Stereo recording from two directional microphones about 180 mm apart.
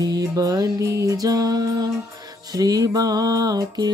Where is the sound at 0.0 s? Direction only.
20° right (ahead or behind).